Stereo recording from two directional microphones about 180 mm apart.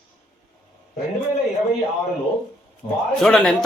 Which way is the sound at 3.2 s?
Centre (ahead or behind).